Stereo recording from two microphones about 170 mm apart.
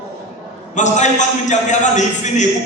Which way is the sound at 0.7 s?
45° left (ahead or behind).